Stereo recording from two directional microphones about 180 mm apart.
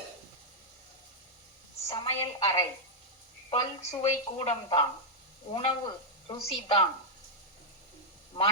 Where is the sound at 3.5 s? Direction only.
35° left (ahead or behind).